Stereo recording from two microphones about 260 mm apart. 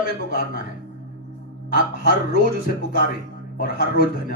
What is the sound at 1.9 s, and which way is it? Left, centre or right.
A man's voice, left.